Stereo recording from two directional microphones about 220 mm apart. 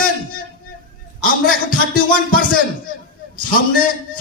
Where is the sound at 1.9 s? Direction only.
40° left (ahead or behind).